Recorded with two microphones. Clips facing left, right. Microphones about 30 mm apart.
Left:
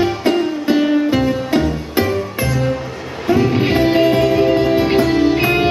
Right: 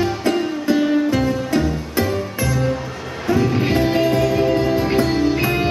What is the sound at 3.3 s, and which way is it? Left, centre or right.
Music, left.